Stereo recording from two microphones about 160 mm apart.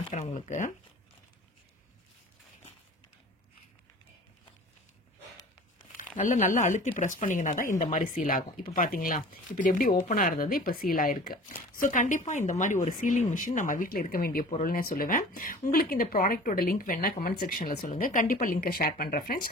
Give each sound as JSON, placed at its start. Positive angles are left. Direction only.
{"t": 0.1, "sound": "speech", "side_deg": 50}
{"t": 6.1, "sound": "speech", "side_deg": 55}